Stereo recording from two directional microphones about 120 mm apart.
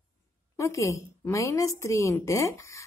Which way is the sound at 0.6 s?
25° left (ahead or behind).